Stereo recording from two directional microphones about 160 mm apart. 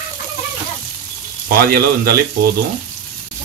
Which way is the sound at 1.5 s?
75° right (ahead or behind).